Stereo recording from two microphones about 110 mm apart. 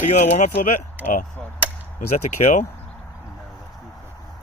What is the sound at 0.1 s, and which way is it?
Speech, 90° left.